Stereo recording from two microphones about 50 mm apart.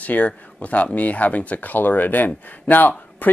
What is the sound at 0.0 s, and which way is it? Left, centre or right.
Speech, left.